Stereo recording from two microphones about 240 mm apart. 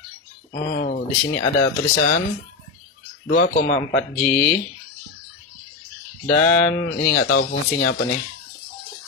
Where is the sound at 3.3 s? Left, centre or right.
Left.